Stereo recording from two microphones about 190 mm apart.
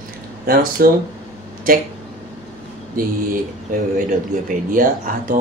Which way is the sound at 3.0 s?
45° right (ahead or behind).